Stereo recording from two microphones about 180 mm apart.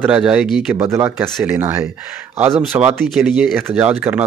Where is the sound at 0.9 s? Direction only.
15° right (ahead or behind).